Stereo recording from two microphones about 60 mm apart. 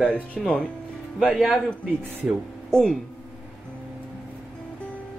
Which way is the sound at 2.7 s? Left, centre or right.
Centre.